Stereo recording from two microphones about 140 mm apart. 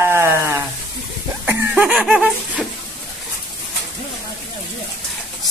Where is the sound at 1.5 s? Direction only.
10° right (ahead or behind).